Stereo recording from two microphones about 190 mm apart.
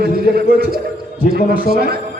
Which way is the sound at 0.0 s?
55° right (ahead or behind).